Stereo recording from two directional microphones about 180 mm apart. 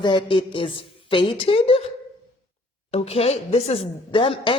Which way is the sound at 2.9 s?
35° left (ahead or behind).